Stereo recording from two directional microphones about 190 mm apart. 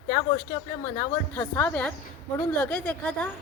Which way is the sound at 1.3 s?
10° left (ahead or behind).